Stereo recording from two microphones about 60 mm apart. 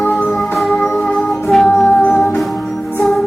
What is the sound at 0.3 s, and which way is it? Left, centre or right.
Music, centre.